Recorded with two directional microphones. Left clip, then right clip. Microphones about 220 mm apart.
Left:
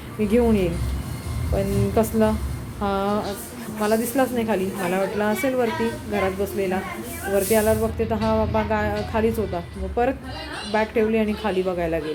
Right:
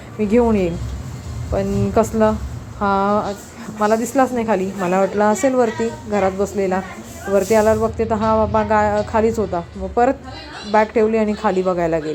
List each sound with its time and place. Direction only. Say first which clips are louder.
0.3 s a woman's voice: right 4 dB; 15° right (ahead or behind)